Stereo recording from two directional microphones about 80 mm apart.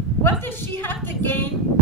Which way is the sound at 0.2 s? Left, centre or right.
Left.